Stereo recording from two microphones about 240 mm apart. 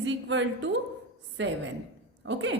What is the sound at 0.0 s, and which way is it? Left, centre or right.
A woman's voice, right.